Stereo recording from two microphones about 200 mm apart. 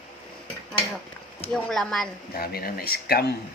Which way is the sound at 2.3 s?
50° left (ahead or behind).